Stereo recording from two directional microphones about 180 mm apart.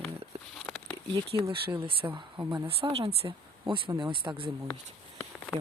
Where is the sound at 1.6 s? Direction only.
30° right (ahead or behind).